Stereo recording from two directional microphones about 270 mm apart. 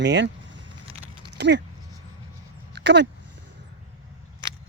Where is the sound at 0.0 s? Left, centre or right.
Right.